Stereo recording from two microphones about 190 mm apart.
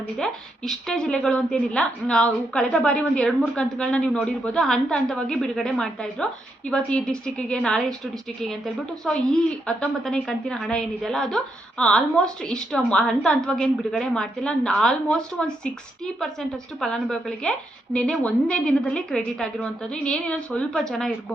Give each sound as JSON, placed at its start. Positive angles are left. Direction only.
{"t": 0.2, "sound": "a woman's voice", "side_deg": 0}